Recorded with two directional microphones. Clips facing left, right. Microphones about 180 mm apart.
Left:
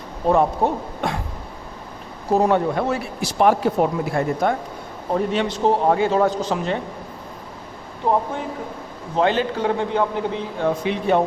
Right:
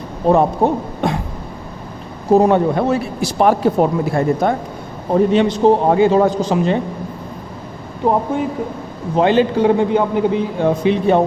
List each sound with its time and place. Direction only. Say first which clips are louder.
0.3 s a man's voice: right 4 dB; 30° right (ahead or behind)
2.3 s a man's voice: right 6 dB; 20° right (ahead or behind)
3.3 s speech: right 3 dB; 40° right (ahead or behind)
5.1 s a man's voice: right 8 dB; 20° right (ahead or behind)
9.1 s a man's voice: right 6 dB; 15° right (ahead or behind)
10.8 s a man's voice: right 6 dB; 30° right (ahead or behind)